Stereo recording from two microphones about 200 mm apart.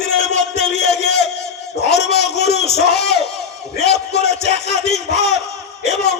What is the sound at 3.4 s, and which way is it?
Crowd, 55° left (ahead or behind).